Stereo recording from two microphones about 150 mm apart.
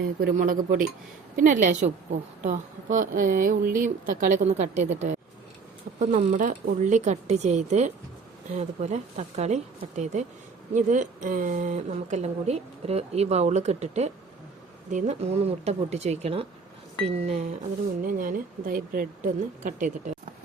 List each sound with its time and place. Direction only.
0.0 s speech: 85° right; by 17.5 s 45° right (ahead or behind)
18.0 s speech: 65° right (ahead or behind)